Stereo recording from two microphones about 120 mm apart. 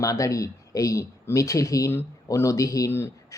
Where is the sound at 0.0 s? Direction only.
30° left (ahead or behind).